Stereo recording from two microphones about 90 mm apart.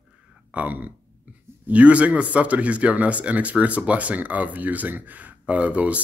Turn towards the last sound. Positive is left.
turn(degrees=-15)  # may be behind; listen again after turning